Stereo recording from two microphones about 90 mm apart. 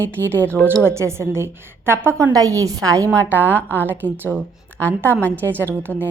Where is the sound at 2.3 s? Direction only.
40° right (ahead or behind).